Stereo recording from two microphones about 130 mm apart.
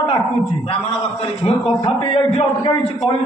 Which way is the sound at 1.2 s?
45° left (ahead or behind).